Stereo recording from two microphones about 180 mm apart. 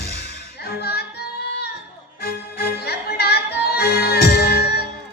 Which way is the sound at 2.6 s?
60° left (ahead or behind).